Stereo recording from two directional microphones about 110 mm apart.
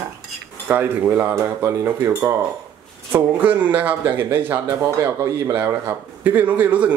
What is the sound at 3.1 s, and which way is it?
A man's voice, 15° right (ahead or behind).